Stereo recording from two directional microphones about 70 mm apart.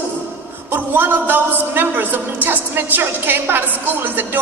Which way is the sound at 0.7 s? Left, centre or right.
Right.